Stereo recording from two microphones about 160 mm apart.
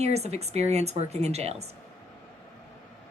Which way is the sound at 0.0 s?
40° right (ahead or behind).